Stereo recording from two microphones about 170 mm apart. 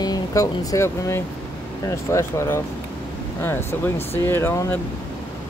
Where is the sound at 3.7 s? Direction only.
10° left (ahead or behind).